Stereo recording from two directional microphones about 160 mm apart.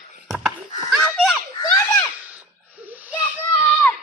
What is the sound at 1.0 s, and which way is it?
Children playing, centre (ahead or behind).